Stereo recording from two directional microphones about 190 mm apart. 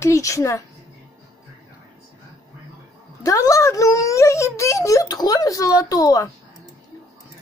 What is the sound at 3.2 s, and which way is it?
Speech, 15° left (ahead or behind).